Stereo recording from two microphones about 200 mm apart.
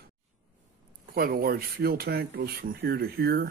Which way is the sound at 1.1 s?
50° right (ahead or behind).